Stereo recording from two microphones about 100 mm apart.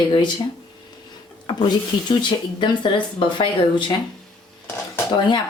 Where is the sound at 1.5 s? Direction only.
50° left (ahead or behind).